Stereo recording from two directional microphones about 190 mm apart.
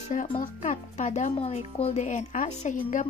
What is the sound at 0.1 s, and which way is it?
A woman's voice, 40° left (ahead or behind).